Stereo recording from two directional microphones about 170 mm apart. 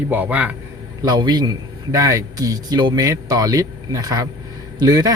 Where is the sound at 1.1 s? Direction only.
25° right (ahead or behind).